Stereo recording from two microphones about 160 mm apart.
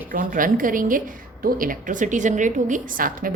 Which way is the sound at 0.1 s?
60° right (ahead or behind).